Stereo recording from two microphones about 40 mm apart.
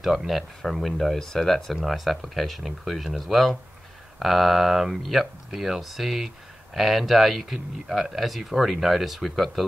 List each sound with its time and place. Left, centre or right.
0.6 s speech: centre